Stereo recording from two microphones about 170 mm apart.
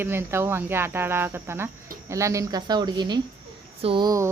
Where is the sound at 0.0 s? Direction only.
15° right (ahead or behind).